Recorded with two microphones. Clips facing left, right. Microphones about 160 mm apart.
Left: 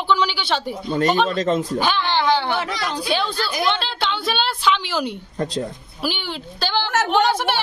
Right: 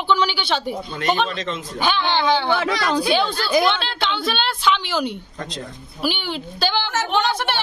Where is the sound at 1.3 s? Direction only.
40° left (ahead or behind).